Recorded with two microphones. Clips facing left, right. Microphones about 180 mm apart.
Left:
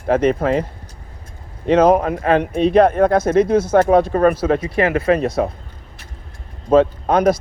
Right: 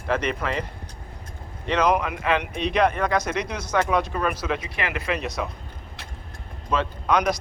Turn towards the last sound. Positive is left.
turn(degrees=50)  # may be behind; listen again after turning